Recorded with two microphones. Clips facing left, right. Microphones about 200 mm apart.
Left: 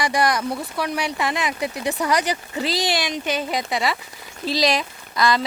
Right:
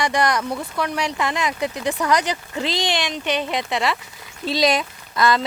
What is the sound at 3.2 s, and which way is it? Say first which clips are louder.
Speech: right 3 dB; 40° left (ahead or behind).